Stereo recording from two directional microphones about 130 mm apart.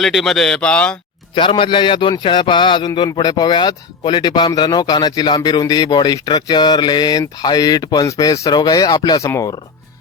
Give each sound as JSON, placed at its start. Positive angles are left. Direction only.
{"t": 0.0, "sound": "speech", "side_deg": 0}
{"t": 1.4, "sound": "speech", "side_deg": 40}